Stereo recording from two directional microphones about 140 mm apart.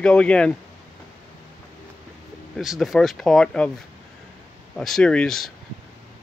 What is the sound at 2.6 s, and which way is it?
Speech, centre (ahead or behind).